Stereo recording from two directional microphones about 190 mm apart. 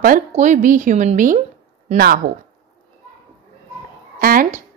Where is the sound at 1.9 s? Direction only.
55° right (ahead or behind).